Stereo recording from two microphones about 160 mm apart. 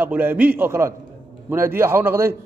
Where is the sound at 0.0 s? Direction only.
10° right (ahead or behind).